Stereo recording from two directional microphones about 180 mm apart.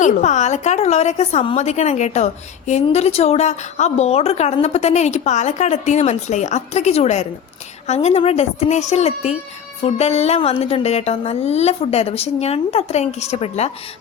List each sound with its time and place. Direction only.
0.0 s a woman's voice: 40° left (ahead or behind)